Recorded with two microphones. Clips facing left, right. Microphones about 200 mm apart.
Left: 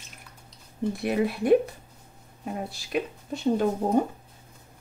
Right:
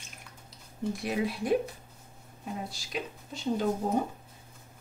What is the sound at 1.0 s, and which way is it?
Speech, 60° left (ahead or behind).